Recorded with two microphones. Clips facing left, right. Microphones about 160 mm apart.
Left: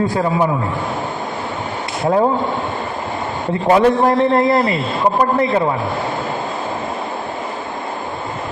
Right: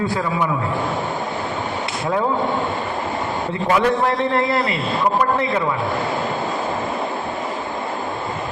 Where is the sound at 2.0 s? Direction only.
35° left (ahead or behind).